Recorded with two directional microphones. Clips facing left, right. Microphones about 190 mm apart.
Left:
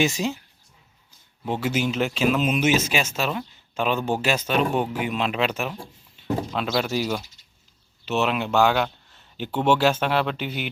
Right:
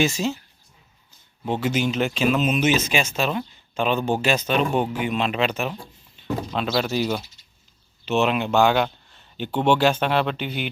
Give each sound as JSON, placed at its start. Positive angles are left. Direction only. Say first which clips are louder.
{"t": 0.0, "sound": "speech", "louder": "right 1 dB", "side_deg": 15}
{"t": 1.5, "sound": "speech", "louder": "right 1 dB", "side_deg": 5}